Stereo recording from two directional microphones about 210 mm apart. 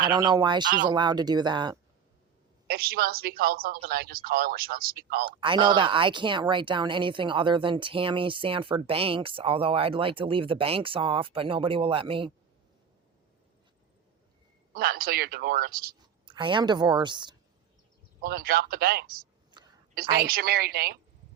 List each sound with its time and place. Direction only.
0.1 s speech: 20° right (ahead or behind)
2.6 s a woman's voice: 45° right (ahead or behind)
5.4 s speech: 25° right (ahead or behind)
14.7 s a woman's voice: 45° right (ahead or behind)
16.2 s speech: 20° right (ahead or behind)
18.2 s a woman's voice: 45° right (ahead or behind)
19.5 s a sound: 20° right (ahead or behind)
20.2 s a woman's voice: 45° right (ahead or behind)